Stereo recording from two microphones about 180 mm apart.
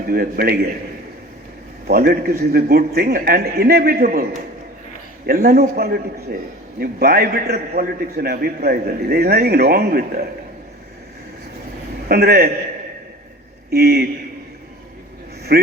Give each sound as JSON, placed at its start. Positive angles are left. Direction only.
{"t": 0.1, "sound": "a man's voice", "side_deg": -60}
{"t": 1.9, "sound": "a man's voice", "side_deg": -60}
{"t": 12.0, "sound": "a man's voice", "side_deg": -60}
{"t": 13.7, "sound": "a man's voice", "side_deg": -60}
{"t": 15.5, "sound": "a man's voice", "side_deg": -60}